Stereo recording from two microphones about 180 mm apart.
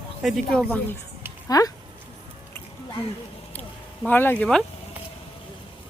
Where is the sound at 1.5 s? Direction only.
20° left (ahead or behind).